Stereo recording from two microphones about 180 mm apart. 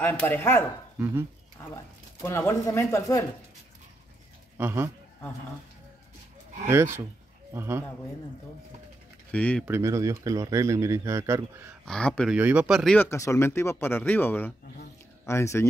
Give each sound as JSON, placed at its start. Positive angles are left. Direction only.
{"t": 0.0, "sound": "speech", "side_deg": 10}
{"t": 0.9, "sound": "speech", "side_deg": -10}
{"t": 2.2, "sound": "speech", "side_deg": 15}
{"t": 4.6, "sound": "speech", "side_deg": -10}
{"t": 6.7, "sound": "speech", "side_deg": -15}
{"t": 9.3, "sound": "speech", "side_deg": 5}
{"t": 9.7, "sound": "speech", "side_deg": -15}
{"t": 11.8, "sound": "speech", "side_deg": 5}
{"t": 12.4, "sound": "speech", "side_deg": -10}
{"t": 12.9, "sound": "speech", "side_deg": 15}